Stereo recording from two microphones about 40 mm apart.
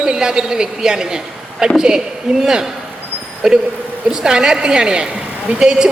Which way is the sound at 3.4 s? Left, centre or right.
Centre.